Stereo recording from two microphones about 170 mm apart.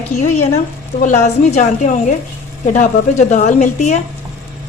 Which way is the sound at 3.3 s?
45° left (ahead or behind).